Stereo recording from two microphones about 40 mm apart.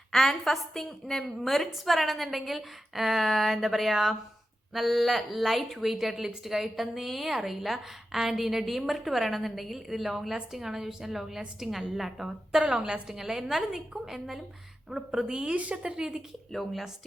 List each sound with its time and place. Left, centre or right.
0.1 s a woman's voice: centre
15.5 s a woman's voice: right
15.8 s a woman's voice: right
16.5 s a woman's voice: centre